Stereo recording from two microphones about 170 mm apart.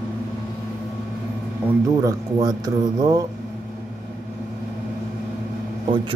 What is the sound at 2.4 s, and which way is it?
Speech, 20° right (ahead or behind).